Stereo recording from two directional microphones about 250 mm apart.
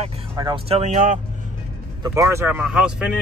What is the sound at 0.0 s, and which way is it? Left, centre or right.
Speech, right.